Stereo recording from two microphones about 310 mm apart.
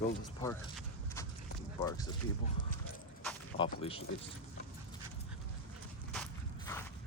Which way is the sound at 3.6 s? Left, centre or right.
Centre.